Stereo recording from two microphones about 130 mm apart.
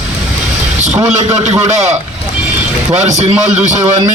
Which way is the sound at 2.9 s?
60° right (ahead or behind).